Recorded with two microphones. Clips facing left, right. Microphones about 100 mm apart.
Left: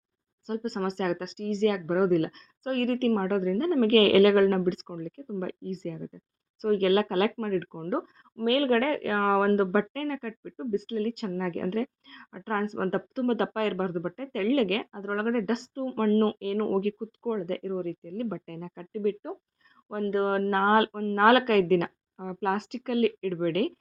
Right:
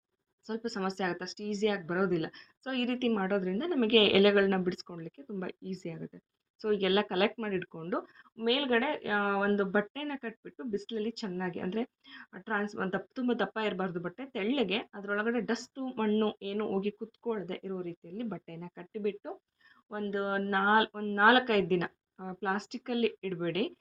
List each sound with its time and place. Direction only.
0.4 s speech: 40° left (ahead or behind)